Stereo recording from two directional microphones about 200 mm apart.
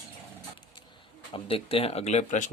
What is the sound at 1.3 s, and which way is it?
Speech, 30° left (ahead or behind).